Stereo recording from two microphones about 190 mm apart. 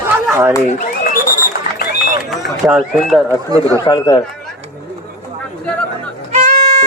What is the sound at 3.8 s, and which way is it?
Speech, 20° left (ahead or behind).